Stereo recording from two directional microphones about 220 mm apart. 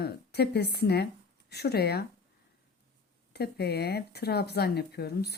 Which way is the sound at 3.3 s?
50° left (ahead or behind).